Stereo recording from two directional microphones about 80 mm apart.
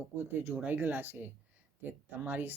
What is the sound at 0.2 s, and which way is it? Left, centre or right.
Speech, right.